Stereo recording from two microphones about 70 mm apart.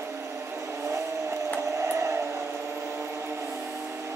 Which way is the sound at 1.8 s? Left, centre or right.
Right.